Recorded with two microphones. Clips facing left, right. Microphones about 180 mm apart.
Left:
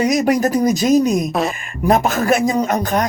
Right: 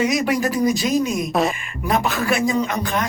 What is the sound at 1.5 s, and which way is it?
A man's voice, 40° left (ahead or behind).